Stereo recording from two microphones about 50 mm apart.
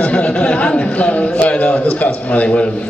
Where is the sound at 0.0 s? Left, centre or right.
Left.